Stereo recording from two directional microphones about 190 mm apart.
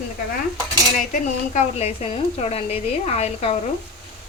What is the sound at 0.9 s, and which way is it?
A woman's voice, 40° left (ahead or behind).